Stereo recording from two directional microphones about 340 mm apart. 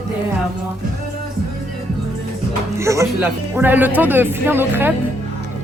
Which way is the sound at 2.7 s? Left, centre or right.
Centre.